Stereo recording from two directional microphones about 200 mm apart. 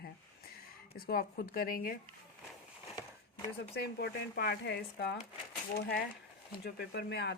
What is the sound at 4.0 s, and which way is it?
Speech, 50° left (ahead or behind).